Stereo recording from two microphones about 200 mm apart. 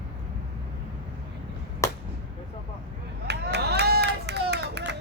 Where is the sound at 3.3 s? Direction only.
55° right (ahead or behind).